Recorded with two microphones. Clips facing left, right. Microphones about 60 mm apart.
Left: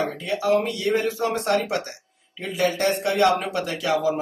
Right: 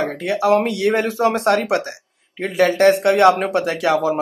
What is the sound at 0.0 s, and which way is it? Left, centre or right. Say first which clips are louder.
Speech: right 5 dB; right.